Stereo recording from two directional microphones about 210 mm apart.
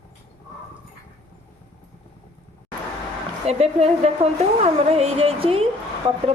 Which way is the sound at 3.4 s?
30° right (ahead or behind).